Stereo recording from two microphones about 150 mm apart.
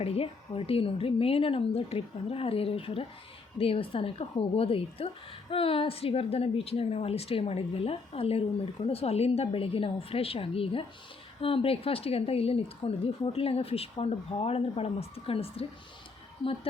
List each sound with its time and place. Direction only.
0.0 s speech: 40° left (ahead or behind)